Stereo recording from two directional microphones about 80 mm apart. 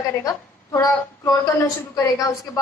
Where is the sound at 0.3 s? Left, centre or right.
Left.